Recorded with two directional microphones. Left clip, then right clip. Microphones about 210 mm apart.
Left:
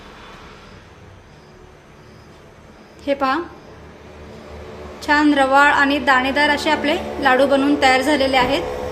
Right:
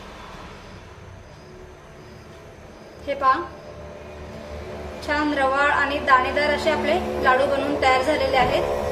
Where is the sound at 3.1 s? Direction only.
55° left (ahead or behind).